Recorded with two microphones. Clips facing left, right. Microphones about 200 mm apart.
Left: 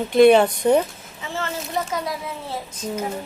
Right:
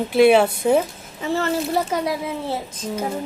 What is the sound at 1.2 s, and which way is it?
Speech, 35° right (ahead or behind).